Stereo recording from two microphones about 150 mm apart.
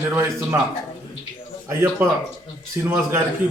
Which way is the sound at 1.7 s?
15° right (ahead or behind).